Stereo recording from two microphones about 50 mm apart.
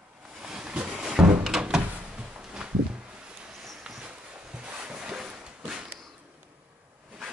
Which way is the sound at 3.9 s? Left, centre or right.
Centre.